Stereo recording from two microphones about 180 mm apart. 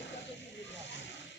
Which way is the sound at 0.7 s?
85° left.